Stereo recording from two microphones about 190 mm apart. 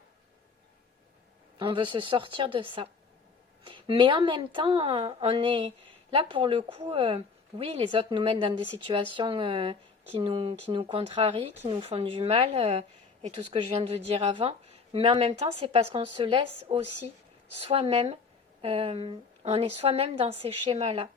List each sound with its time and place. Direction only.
1.5 s a woman's voice: 25° right (ahead or behind)